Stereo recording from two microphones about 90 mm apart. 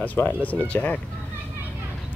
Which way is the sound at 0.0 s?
20° left (ahead or behind).